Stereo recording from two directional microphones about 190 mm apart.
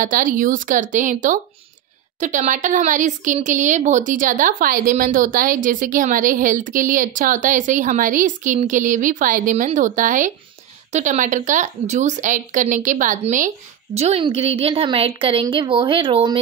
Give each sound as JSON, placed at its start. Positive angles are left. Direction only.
{"t": 0.0, "sound": "a woman's voice", "side_deg": -45}
{"t": 13.9, "sound": "a woman's voice", "side_deg": -30}